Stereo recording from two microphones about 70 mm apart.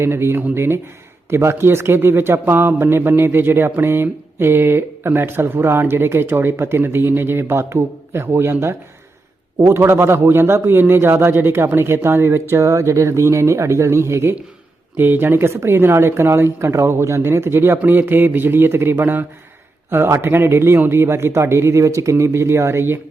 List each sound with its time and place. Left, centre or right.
0.0 s a man's voice: right
14.9 s a man's voice: right